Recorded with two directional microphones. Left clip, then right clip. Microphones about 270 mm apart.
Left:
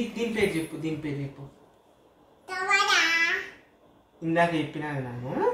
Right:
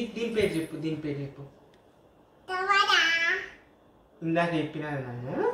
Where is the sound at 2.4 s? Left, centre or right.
Centre.